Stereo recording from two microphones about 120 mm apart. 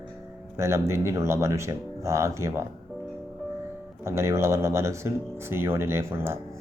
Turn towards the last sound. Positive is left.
turn(degrees=-20)  # may be behind; listen again after turning